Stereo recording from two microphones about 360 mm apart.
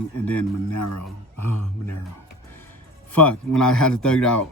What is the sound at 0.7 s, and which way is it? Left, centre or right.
Speech, left.